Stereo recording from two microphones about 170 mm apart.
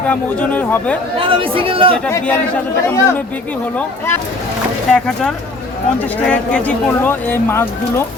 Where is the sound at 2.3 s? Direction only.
10° left (ahead or behind).